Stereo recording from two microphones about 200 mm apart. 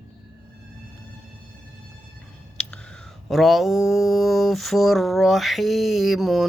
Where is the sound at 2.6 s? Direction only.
5° left (ahead or behind).